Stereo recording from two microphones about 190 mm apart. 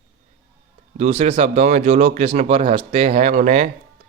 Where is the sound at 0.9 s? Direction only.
35° right (ahead or behind).